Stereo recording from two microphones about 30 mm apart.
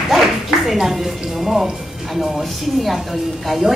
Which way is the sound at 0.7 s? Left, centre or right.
Centre.